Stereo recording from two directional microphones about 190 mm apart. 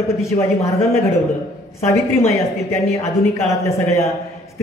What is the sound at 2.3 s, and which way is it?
A woman's voice, 15° left (ahead or behind).